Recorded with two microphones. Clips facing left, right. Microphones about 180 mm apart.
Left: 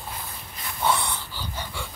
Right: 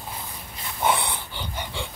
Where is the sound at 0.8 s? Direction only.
20° right (ahead or behind).